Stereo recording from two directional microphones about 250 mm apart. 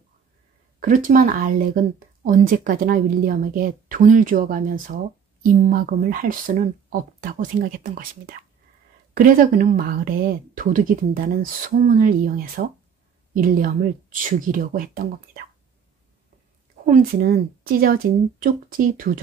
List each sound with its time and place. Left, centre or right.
0.7 s speech: right
16.8 s speech: right